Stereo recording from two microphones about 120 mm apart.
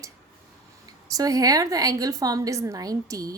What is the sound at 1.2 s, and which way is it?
A woman's voice, 30° right (ahead or behind).